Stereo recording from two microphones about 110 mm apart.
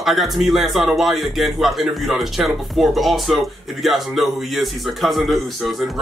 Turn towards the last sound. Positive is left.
turn(degrees=0)  # may be behind; listen again after turning